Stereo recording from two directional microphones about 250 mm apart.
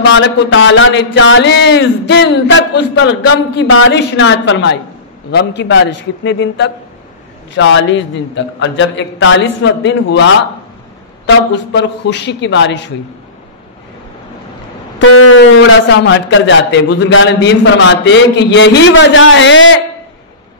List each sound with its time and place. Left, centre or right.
0.0 s a man's voice: left
15.0 s a man's voice: left